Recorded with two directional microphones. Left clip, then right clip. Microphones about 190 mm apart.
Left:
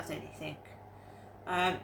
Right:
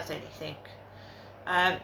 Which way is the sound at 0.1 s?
15° left (ahead or behind).